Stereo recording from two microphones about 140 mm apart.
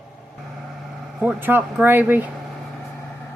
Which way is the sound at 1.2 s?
15° right (ahead or behind).